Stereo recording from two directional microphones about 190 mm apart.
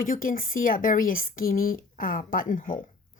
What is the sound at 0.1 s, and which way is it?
Speech, 45° left (ahead or behind).